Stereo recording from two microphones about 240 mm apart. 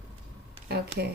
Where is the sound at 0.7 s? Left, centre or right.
Right.